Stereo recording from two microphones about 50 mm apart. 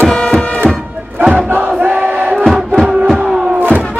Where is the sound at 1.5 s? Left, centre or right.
Right.